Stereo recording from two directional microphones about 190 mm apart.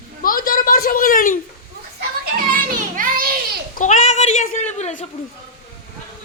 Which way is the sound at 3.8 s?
40° left (ahead or behind).